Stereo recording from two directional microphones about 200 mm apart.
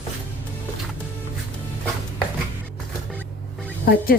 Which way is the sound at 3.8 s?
50° left (ahead or behind).